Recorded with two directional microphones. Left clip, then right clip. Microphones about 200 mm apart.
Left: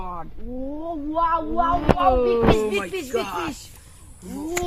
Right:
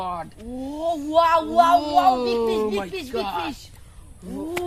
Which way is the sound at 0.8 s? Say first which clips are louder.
Right 5 dB; 50° right (ahead or behind).